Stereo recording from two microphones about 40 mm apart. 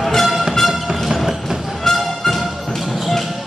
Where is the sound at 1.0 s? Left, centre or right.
Centre.